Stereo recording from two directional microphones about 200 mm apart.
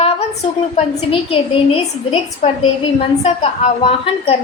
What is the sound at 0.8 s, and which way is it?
A woman's voice, 30° left (ahead or behind).